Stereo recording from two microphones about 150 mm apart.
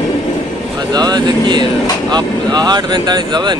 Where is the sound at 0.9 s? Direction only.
25° right (ahead or behind).